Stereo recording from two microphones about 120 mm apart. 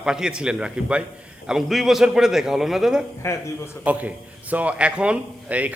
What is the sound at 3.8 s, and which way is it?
A man's voice, 10° right (ahead or behind).